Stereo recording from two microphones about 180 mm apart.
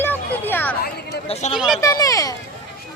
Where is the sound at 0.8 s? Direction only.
60° left (ahead or behind).